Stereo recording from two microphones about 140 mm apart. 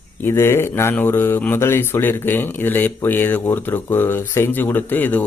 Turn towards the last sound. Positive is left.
turn(degrees=15)  # may be behind; listen again after turning